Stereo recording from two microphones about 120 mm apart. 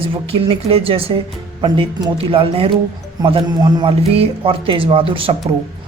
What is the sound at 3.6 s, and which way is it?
Speech, 40° right (ahead or behind).